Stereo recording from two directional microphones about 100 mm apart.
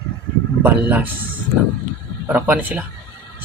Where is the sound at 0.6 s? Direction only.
20° right (ahead or behind).